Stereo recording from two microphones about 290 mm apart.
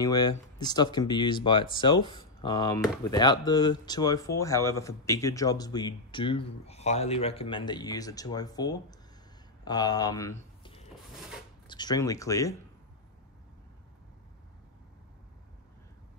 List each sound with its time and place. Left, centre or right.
0.0 s speech: centre